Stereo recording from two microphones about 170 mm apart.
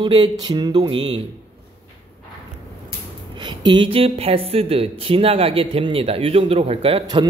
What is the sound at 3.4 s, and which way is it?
A man's voice, 25° right (ahead or behind).